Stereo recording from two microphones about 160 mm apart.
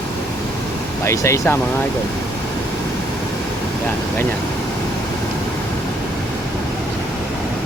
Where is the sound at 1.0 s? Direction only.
20° left (ahead or behind).